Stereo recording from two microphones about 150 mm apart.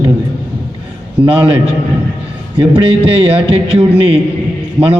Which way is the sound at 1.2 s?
35° right (ahead or behind).